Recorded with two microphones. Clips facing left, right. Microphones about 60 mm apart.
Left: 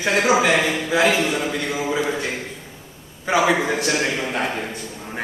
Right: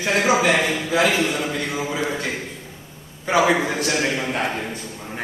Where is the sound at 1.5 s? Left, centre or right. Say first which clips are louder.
Left 2 dB; centre.